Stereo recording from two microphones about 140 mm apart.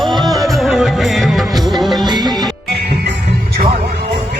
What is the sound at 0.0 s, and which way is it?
Music, centre (ahead or behind).